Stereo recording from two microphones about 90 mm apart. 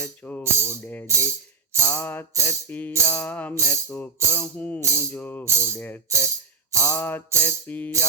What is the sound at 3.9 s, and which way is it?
Music, 30° left (ahead or behind).